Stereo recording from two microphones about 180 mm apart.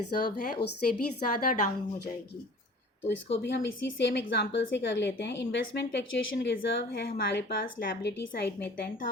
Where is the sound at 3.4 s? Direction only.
70° left (ahead or behind).